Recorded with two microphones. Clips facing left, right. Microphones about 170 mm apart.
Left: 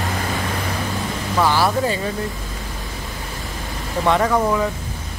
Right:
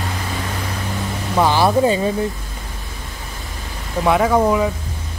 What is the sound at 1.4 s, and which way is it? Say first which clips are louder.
Speech: right 4 dB; 20° right (ahead or behind).